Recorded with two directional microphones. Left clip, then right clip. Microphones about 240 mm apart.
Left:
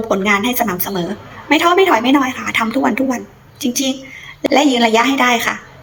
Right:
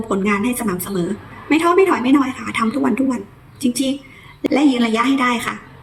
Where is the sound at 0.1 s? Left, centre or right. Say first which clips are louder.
Left 4 dB; centre.